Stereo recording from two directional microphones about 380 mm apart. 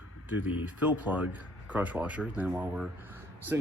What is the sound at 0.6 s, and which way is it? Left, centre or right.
Speech, centre.